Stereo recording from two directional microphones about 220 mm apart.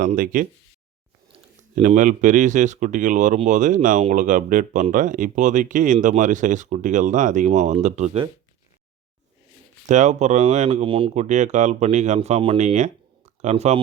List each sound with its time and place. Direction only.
0.0 s speech: 40° right (ahead or behind)
1.7 s speech: 35° right (ahead or behind)
9.8 s speech: 35° right (ahead or behind)